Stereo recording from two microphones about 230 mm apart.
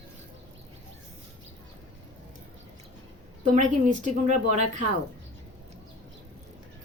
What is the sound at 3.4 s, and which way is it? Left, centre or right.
A woman's voice, right.